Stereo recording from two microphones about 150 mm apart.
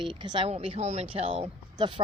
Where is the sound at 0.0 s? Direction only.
30° right (ahead or behind).